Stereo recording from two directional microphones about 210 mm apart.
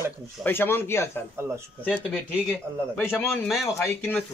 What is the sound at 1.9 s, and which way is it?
Speech, centre (ahead or behind).